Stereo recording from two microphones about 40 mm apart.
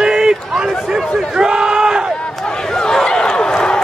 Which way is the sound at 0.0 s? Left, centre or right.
Centre.